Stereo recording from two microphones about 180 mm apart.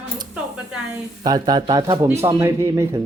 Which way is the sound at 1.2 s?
20° right (ahead or behind).